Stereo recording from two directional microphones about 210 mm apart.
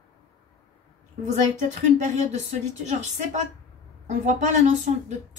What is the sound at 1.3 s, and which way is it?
A woman's voice, 35° right (ahead or behind).